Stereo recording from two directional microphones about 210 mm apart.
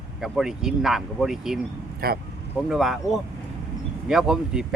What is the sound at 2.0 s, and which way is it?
Speech, 45° right (ahead or behind).